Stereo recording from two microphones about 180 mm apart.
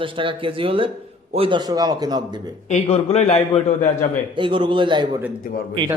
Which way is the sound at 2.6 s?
40° left (ahead or behind).